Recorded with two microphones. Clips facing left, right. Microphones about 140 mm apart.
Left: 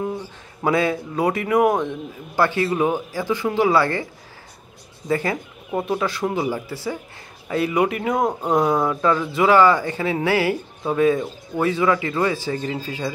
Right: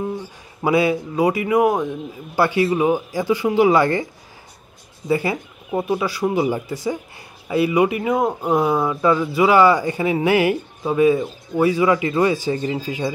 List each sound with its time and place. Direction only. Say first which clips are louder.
0.7 s speech: right 2 dB; 10° right (ahead or behind)
5.0 s speech: right 2 dB; 10° right (ahead or behind)